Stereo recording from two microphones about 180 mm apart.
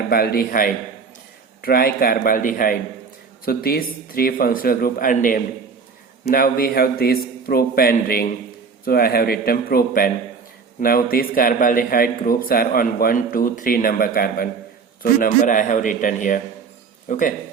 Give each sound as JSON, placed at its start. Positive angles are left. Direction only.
{"t": 0.1, "sound": "a man's voice", "side_deg": 60}